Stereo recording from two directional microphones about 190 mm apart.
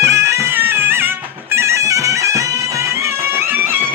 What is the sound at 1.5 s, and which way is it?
Bagpipes, 15° right (ahead or behind).